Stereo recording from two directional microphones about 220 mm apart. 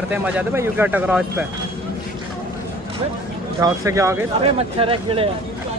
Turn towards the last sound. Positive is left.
turn(degrees=-25)  # may be behind; listen again after turning